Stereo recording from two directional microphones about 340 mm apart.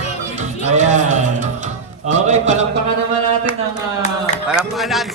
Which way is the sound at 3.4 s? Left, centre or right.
Centre.